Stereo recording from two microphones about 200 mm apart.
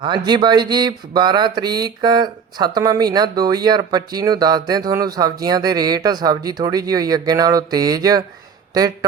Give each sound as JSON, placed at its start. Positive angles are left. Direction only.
{"t": 0.0, "sound": "speech", "side_deg": -20}